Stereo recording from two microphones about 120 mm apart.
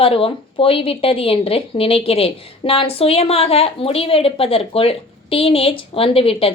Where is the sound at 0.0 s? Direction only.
50° left (ahead or behind).